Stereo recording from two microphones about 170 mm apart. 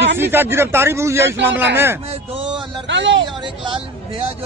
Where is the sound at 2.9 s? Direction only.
90° right.